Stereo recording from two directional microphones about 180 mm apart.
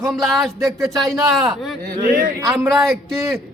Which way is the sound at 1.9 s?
45° right (ahead or behind).